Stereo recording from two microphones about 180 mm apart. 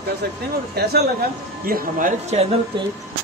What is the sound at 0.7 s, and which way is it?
A man's voice, 65° right (ahead or behind).